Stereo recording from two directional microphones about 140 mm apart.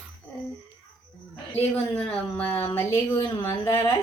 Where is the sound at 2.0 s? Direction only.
10° left (ahead or behind).